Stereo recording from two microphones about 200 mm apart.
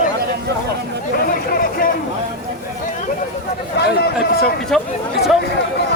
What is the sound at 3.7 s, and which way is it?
Run, 55° left (ahead or behind).